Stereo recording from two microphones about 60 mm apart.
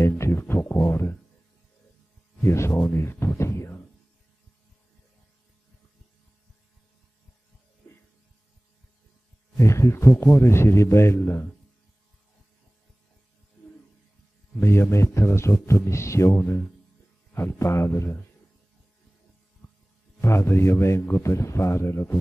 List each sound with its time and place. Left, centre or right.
0.2 s speech: left
2.4 s speech: left
9.6 s speech: left
14.6 s speech: left
20.2 s speech: left
21.2 s speech: left